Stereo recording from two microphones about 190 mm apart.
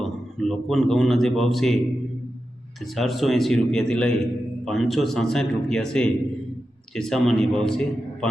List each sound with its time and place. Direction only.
0.3 s a man's voice: centre (ahead or behind)
2.8 s a man's voice: centre (ahead or behind)